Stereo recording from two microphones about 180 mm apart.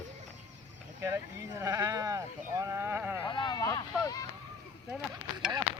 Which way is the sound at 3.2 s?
25° left (ahead or behind).